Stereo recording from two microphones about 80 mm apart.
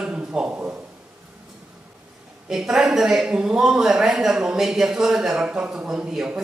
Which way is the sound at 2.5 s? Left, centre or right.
Centre.